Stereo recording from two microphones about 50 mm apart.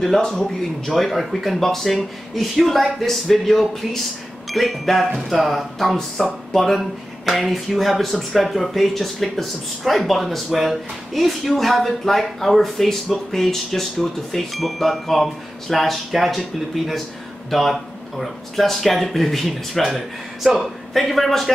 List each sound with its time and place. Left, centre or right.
0.3 s speech: centre